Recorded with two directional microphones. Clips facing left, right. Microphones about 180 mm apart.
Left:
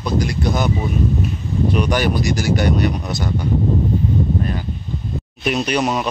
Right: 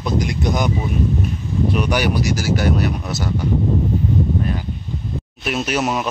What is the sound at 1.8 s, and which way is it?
Speech, 10° right (ahead or behind).